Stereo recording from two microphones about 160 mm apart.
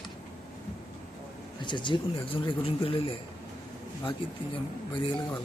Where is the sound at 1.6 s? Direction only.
30° left (ahead or behind).